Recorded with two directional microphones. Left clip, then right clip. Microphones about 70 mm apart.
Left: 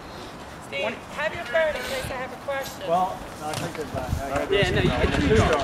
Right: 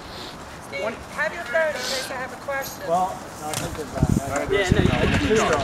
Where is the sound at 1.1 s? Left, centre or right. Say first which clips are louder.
Right 2 dB; centre.